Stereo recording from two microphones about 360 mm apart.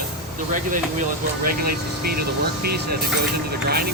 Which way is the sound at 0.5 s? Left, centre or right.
Right.